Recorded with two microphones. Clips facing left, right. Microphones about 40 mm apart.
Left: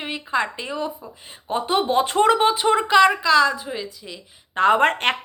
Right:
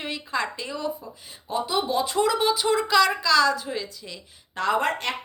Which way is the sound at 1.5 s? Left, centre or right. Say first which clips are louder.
Left 4 dB; left.